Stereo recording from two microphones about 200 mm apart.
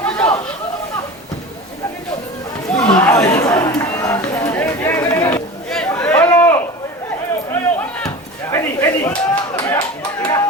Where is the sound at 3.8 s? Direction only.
15° left (ahead or behind).